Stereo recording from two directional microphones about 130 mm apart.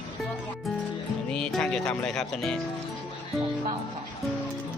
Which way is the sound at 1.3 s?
5° left (ahead or behind).